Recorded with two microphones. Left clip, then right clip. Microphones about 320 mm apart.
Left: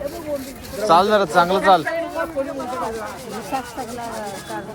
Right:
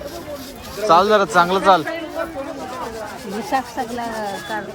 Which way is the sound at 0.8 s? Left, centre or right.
Centre.